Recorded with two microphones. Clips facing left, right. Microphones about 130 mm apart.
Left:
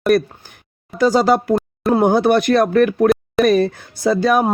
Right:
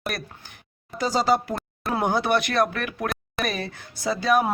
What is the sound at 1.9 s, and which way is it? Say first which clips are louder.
Speech: left 8 dB; 45° left (ahead or behind).